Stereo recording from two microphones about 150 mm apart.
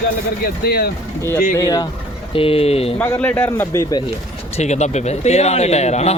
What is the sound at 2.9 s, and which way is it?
Speech, 15° left (ahead or behind).